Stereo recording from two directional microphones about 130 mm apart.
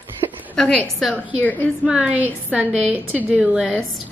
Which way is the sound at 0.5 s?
10° left (ahead or behind).